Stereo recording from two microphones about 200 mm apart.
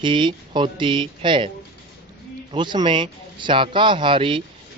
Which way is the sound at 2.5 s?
25° right (ahead or behind).